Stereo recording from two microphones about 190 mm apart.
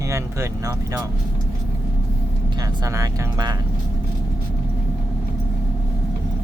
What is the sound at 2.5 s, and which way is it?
Speech, 20° right (ahead or behind).